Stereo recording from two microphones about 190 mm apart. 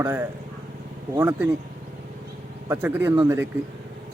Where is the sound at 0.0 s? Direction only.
10° right (ahead or behind).